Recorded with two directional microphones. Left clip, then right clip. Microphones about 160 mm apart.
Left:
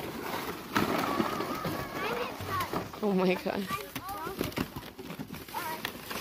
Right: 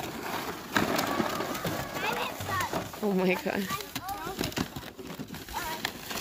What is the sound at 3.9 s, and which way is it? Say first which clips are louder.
Clip-clop: right 1 dB; 30° right (ahead or behind).